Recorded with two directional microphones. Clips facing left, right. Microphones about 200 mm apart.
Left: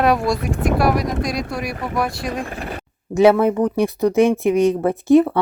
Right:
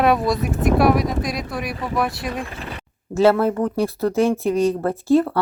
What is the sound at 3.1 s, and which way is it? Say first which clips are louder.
Speech: left 3 dB; 15° left (ahead or behind).